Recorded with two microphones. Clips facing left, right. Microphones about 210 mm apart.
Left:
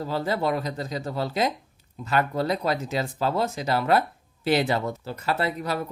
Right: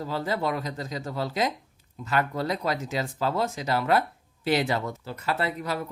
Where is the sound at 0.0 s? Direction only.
30° left (ahead or behind).